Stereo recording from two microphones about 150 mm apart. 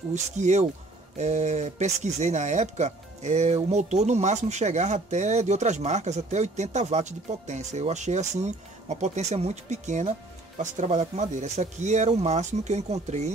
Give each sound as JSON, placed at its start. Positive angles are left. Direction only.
{"t": 0.1, "sound": "speech", "side_deg": -50}